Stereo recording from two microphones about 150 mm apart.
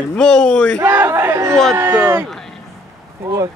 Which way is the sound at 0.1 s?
5° left (ahead or behind).